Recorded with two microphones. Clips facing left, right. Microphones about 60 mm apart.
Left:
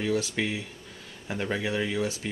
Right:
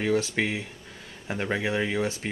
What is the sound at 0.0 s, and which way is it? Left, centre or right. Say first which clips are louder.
Speech: right 3 dB; right.